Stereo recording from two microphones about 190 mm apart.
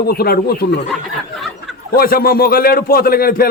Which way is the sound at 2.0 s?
50° left (ahead or behind).